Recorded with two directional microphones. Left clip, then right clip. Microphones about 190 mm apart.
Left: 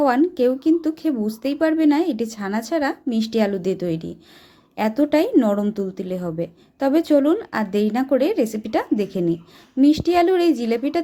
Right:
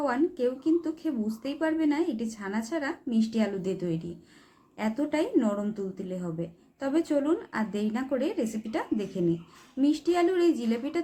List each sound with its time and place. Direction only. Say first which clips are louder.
0.0 s a woman's voice: left 10 dB; 45° left (ahead or behind)